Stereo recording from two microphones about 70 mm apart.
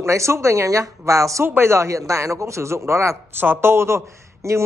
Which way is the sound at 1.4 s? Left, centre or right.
Right.